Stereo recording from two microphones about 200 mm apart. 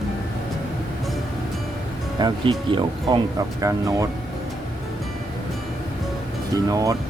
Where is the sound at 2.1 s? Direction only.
25° right (ahead or behind).